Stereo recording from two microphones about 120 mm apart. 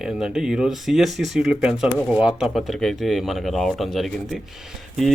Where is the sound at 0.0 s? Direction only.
5° right (ahead or behind).